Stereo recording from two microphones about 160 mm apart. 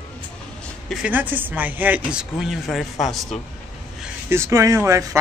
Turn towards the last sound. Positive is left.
turn(degrees=-15)  # may be behind; listen again after turning